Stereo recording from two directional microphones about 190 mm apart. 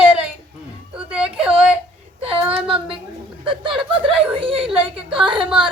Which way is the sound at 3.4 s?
25° right (ahead or behind).